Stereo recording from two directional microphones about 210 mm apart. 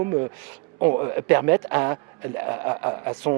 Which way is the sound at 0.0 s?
25° right (ahead or behind).